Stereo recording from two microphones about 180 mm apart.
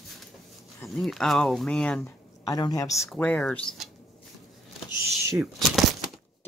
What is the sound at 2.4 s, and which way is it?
Speech, 20° left (ahead or behind).